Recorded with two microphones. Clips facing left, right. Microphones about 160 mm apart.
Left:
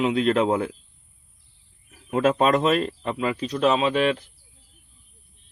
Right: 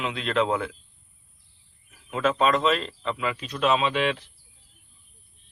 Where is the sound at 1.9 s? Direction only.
45° left (ahead or behind).